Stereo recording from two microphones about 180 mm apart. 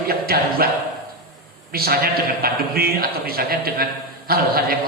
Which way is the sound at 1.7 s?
55° right (ahead or behind).